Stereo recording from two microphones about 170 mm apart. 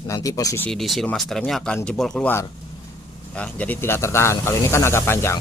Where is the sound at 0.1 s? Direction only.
20° left (ahead or behind).